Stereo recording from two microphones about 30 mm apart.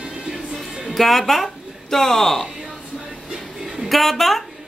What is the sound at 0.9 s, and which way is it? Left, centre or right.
A woman's voice, centre.